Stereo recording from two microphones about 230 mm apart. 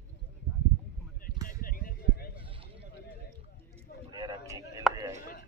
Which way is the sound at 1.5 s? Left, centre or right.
Left.